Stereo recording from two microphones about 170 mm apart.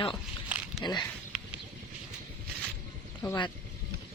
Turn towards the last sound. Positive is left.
turn(degrees=20)  # may be behind; listen again after turning